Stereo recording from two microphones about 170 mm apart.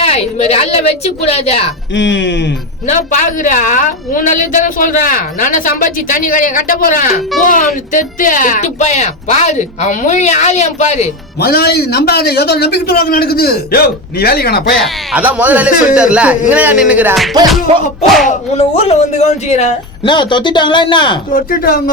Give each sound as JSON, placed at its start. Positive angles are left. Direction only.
{"t": 0.0, "sound": "a woman's voice", "side_deg": 35}
{"t": 1.9, "sound": "speech", "side_deg": 90}
{"t": 2.8, "sound": "a woman's voice", "side_deg": 45}
{"t": 11.3, "sound": "a man's voice", "side_deg": 70}
{"t": 15.1, "sound": "speech", "side_deg": -10}
{"t": 18.5, "sound": "a woman's voice", "side_deg": 35}
{"t": 20.1, "sound": "speech", "side_deg": 25}
{"t": 21.3, "sound": "a man's voice", "side_deg": 60}